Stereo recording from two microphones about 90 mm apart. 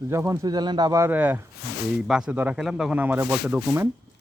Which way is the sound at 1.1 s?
20° right (ahead or behind).